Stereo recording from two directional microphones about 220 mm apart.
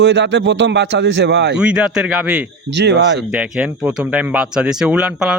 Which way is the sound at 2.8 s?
50° right (ahead or behind).